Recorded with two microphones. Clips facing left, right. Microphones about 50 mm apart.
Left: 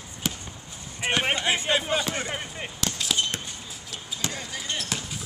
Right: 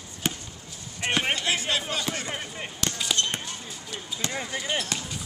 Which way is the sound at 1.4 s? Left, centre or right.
Left.